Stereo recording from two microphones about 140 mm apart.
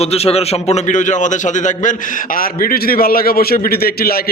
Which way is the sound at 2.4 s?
90° left.